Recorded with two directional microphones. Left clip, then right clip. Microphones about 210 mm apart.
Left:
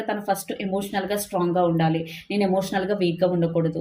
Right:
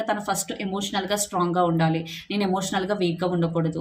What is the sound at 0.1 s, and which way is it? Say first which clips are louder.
Speech: even; 20° right (ahead or behind).